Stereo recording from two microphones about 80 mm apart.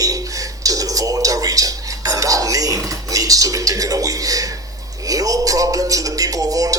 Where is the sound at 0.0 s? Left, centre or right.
Right.